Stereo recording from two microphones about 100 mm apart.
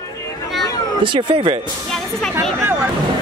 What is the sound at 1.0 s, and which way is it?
Speech, 60° right (ahead or behind).